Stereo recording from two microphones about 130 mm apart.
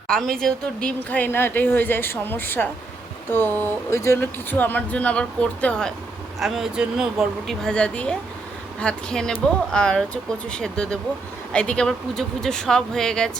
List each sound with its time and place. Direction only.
0.1 s speech: 5° left (ahead or behind)
6.4 s speech: 5° right (ahead or behind)